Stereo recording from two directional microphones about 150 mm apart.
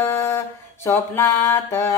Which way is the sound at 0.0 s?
20° left (ahead or behind).